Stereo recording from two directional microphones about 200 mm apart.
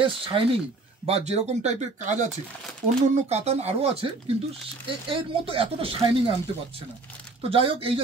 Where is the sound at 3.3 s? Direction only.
30° right (ahead or behind).